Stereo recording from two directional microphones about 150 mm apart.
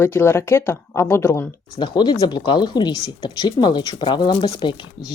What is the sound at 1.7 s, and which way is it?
Speech, 30° left (ahead or behind).